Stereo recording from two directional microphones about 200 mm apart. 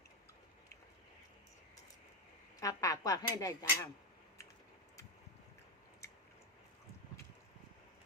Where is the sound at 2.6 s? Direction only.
15° left (ahead or behind).